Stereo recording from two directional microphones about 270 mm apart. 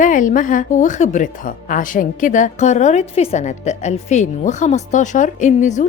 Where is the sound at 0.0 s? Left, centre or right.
Left.